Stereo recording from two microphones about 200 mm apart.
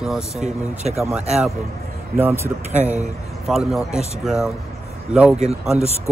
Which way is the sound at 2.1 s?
10° right (ahead or behind).